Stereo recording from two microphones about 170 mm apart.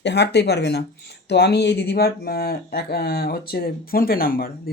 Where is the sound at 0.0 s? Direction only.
85° left.